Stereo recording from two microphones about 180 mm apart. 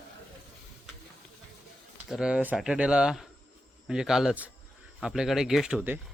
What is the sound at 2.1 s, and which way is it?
Speech, 5° right (ahead or behind).